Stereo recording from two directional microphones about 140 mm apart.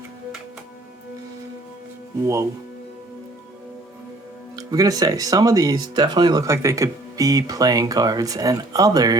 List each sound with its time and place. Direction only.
2.2 s speech: 20° right (ahead or behind)
4.5 s speech: 25° right (ahead or behind)